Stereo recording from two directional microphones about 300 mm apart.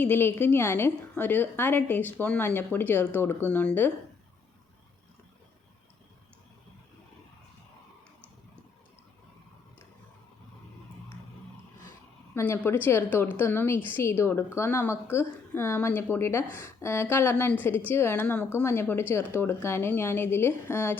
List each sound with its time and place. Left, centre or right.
0.0 s a woman's voice: centre
12.3 s a woman's voice: centre